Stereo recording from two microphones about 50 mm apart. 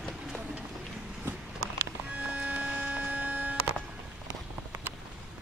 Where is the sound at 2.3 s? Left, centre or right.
Right.